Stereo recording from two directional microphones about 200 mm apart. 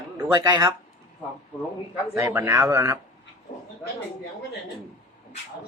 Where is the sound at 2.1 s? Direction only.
15° right (ahead or behind).